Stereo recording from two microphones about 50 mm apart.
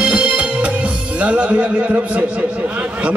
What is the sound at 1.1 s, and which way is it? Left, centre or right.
A man's voice, right.